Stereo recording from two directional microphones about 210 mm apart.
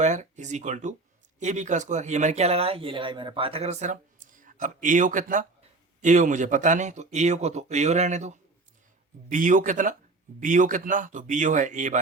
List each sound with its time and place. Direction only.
0.0 s speech: 35° right (ahead or behind)